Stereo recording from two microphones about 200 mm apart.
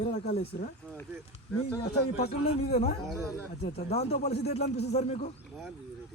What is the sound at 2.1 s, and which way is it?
A man's voice, 30° left (ahead or behind).